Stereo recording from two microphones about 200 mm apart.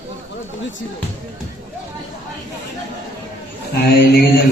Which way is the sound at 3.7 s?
50° left (ahead or behind).